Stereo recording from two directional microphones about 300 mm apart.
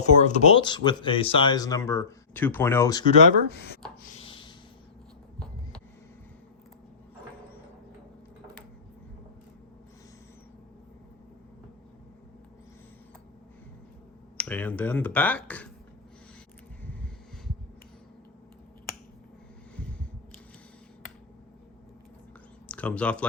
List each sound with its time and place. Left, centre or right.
0.0 s speech: left
4.2 s a sound: centre
14.3 s speech: centre
22.7 s speech: centre